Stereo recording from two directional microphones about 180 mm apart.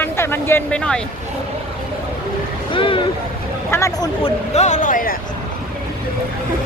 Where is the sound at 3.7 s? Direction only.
15° left (ahead or behind).